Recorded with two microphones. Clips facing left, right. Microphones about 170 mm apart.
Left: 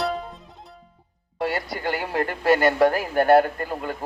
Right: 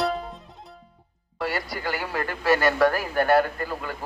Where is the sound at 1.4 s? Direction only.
20° left (ahead or behind).